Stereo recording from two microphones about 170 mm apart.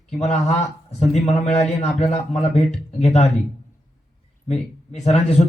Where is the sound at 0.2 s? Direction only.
40° left (ahead or behind).